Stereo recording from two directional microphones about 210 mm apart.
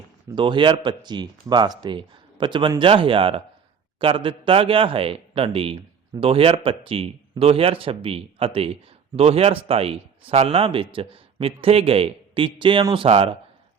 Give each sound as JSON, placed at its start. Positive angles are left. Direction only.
{"t": 0.3, "sound": "speech", "side_deg": -25}